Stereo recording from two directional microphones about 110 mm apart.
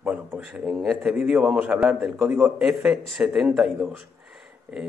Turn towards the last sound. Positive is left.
turn(degrees=-5)  # may be behind; listen again after turning